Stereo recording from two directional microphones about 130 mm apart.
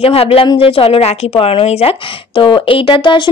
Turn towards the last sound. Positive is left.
turn(degrees=40)  # may be behind; listen again after turning